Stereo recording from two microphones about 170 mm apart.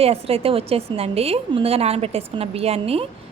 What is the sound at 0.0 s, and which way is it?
A woman's voice, 35° right (ahead or behind).